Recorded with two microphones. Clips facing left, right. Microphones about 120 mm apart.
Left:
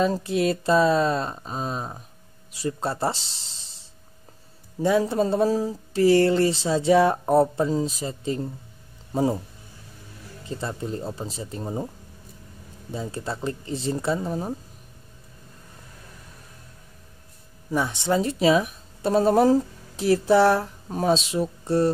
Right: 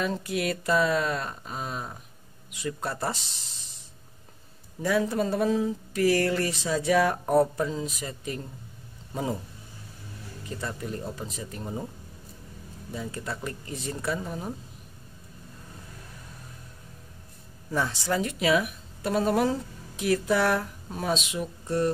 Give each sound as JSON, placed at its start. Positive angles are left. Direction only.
{"t": 0.0, "sound": "speech", "side_deg": 30}
{"t": 4.8, "sound": "speech", "side_deg": 25}
{"t": 10.4, "sound": "speech", "side_deg": 30}
{"t": 12.9, "sound": "speech", "side_deg": 30}
{"t": 17.6, "sound": "speech", "side_deg": 15}